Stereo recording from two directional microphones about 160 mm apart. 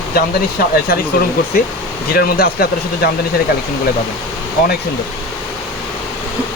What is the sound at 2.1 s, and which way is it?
Speech, 70° left (ahead or behind).